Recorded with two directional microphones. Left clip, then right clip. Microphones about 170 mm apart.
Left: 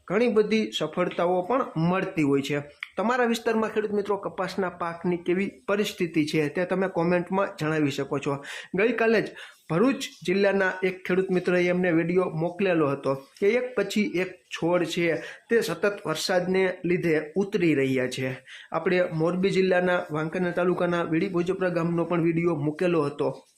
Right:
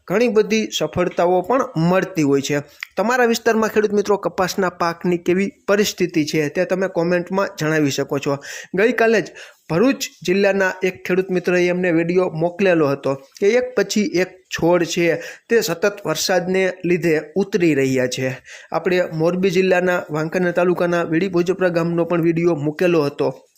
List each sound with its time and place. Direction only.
0.1 s speech: 30° right (ahead or behind)